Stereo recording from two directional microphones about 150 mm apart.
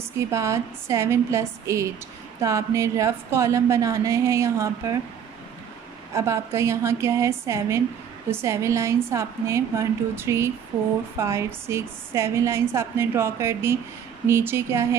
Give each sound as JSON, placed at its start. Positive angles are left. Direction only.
{"t": 0.3, "sound": "a woman's voice", "side_deg": -20}
{"t": 6.1, "sound": "a woman's voice", "side_deg": -20}